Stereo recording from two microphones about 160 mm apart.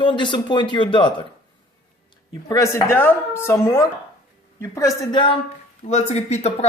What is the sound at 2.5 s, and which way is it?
A woman's voice, 20° left (ahead or behind).